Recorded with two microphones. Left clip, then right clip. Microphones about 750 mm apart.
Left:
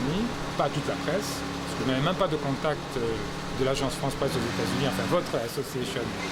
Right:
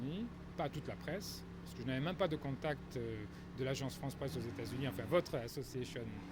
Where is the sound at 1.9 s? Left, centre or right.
Right.